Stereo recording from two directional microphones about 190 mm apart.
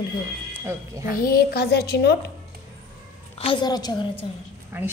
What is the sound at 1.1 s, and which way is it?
A woman's voice, 50° left (ahead or behind).